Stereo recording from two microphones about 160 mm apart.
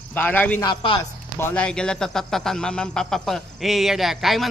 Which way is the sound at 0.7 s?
30° left (ahead or behind).